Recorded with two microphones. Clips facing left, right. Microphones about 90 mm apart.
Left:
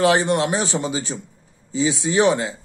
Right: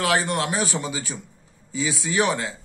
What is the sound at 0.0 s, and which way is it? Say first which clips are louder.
Speech: left 5 dB; 25° left (ahead or behind).